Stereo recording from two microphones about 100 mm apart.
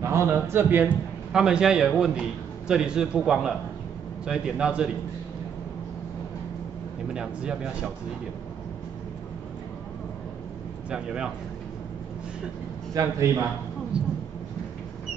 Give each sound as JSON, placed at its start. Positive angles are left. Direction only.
{"t": 0.0, "sound": "a man's voice", "side_deg": -25}
{"t": 1.3, "sound": "a man's voice", "side_deg": -5}
{"t": 7.2, "sound": "a man's voice", "side_deg": -5}
{"t": 10.9, "sound": "a man's voice", "side_deg": -5}
{"t": 12.9, "sound": "a man's voice", "side_deg": -35}
{"t": 13.9, "sound": "a sound", "side_deg": -10}